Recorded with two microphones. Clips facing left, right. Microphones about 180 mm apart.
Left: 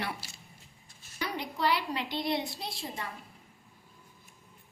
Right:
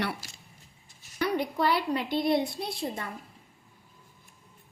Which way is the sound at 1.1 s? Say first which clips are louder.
Right 8 dB; 55° right (ahead or behind).